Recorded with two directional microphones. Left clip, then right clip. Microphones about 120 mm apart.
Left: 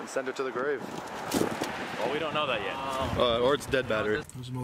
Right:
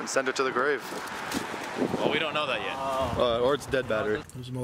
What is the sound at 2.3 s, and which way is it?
Speech, 30° right (ahead or behind).